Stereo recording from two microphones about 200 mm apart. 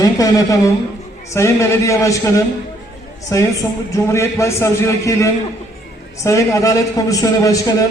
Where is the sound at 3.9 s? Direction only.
15° left (ahead or behind).